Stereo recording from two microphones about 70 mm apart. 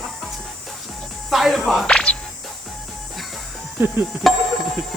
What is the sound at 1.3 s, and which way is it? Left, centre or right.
Music, centre.